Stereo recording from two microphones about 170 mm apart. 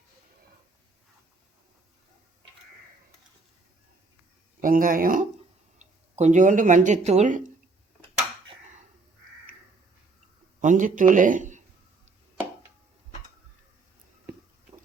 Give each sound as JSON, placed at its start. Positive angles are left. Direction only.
{"t": 4.6, "sound": "speech", "side_deg": -55}
{"t": 5.8, "sound": "speech", "side_deg": -40}
{"t": 10.6, "sound": "speech", "side_deg": -50}